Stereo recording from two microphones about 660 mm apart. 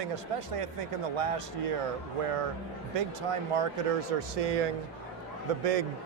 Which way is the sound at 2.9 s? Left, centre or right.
Right.